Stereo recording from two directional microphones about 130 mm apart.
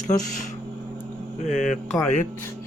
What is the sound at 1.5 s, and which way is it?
Mantra, 80° left.